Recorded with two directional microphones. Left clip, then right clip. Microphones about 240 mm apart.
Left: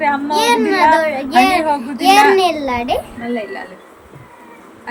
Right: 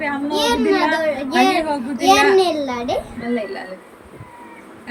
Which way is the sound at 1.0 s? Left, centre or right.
Centre.